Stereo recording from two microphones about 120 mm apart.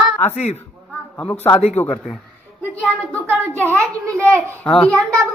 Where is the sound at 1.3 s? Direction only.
20° left (ahead or behind).